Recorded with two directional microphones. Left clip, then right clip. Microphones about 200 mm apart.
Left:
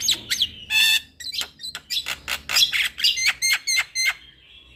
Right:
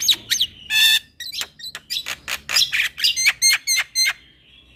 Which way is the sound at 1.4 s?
15° right (ahead or behind).